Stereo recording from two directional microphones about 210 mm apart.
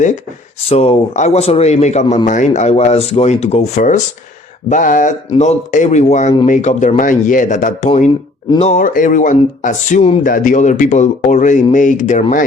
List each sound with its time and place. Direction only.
0.7 s a man's voice: 30° left (ahead or behind)